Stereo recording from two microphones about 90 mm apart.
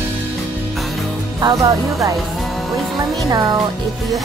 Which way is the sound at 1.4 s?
40° right (ahead or behind).